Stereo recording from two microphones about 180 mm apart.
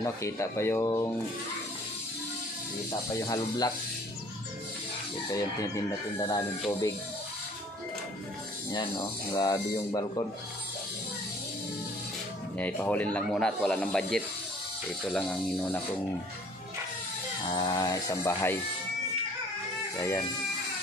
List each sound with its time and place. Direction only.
0.0 s speech: 15° left (ahead or behind)
3.2 s speech: 20° left (ahead or behind)
5.3 s speech: 20° left (ahead or behind)
8.7 s speech: 20° left (ahead or behind)
12.5 s speech: 10° left (ahead or behind)
17.5 s speech: 25° left (ahead or behind)